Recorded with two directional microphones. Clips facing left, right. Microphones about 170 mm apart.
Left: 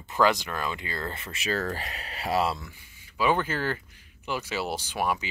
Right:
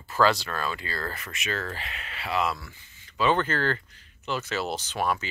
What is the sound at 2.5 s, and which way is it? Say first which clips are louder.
Speech: left 1 dB; 15° left (ahead or behind).